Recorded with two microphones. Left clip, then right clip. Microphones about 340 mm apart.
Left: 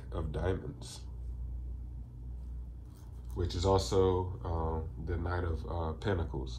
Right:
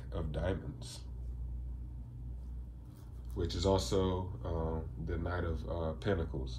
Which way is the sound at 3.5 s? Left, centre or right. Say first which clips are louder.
Left 2 dB; centre.